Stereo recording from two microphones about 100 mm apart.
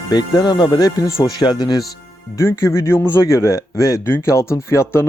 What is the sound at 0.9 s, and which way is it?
Speech, 35° left (ahead or behind).